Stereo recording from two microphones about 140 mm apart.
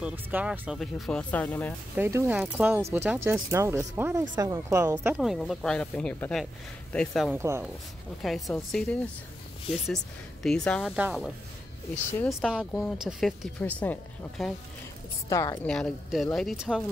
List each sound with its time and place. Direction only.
0.0 s speech: 10° right (ahead or behind); by 1.8 s 10° left (ahead or behind)
2.0 s speech: 15° right (ahead or behind)
5.1 s speech: centre (ahead or behind)
7.3 s speech: 20° right (ahead or behind)
8.2 s speech: centre (ahead or behind)
10.4 s speech: 5° left (ahead or behind)
10.9 s speech: 5° right (ahead or behind)
13.6 s speech: 10° left (ahead or behind)
15.2 s a woman's voice: 25° left (ahead or behind)
15.6 s speech: 5° left (ahead or behind)